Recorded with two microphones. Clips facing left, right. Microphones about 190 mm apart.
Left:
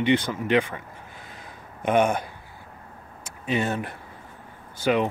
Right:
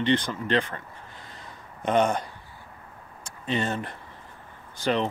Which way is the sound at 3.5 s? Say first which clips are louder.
Left 2 dB; 10° left (ahead or behind).